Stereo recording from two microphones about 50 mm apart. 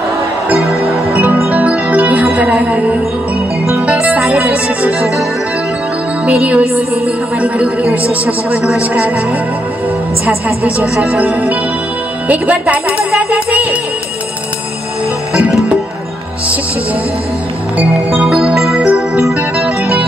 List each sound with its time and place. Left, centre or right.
1.5 s music: right
3.8 s speech: right
6.4 s speech: right
11.1 s speech: right
13.1 s music: right
18.2 s music: centre